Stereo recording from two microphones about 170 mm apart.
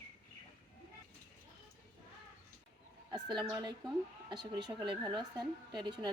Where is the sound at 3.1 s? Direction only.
25° right (ahead or behind).